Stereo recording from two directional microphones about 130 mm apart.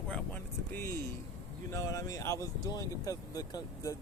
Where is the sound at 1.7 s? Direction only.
25° left (ahead or behind).